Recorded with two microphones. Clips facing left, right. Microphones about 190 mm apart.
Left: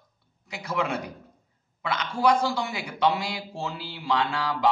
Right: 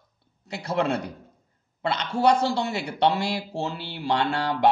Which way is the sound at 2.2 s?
65° right (ahead or behind).